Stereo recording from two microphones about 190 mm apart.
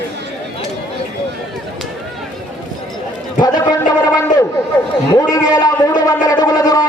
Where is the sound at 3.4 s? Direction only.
20° left (ahead or behind).